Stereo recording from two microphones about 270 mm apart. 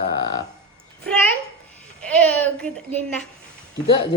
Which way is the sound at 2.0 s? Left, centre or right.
Centre.